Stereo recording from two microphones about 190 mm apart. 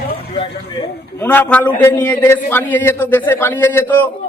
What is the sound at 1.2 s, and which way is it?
A man's voice, 10° left (ahead or behind).